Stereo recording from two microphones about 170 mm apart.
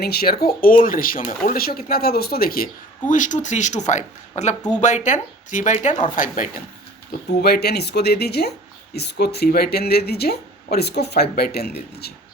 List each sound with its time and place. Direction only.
0.0 s speech: 70° left (ahead or behind)
3.1 s speech: 50° left (ahead or behind)
7.4 s speech: 70° left (ahead or behind)